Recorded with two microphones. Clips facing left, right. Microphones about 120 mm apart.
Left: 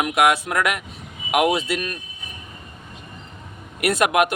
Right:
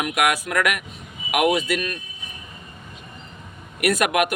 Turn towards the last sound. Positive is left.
turn(degrees=25)  # may be behind; listen again after turning